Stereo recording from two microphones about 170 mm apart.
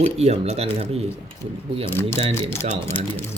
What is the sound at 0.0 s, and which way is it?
Speech, 40° right (ahead or behind).